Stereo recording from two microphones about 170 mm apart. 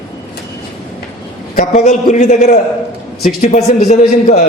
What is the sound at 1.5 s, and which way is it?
A man's voice, 45° left (ahead or behind).